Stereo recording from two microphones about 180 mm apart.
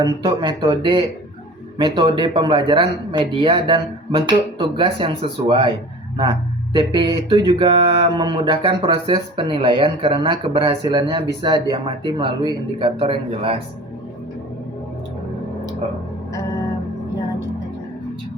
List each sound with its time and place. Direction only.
0.0 s speech: 25° right (ahead or behind)
6.7 s speech: 25° right (ahead or behind)